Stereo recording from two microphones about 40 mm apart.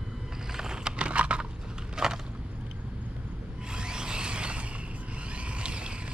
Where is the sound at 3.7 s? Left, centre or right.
Right.